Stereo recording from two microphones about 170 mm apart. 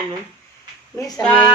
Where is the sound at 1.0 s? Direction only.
20° left (ahead or behind).